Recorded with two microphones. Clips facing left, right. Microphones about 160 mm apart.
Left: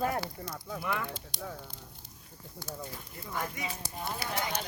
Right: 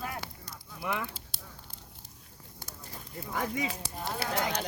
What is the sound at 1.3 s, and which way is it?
Speech, 5° right (ahead or behind).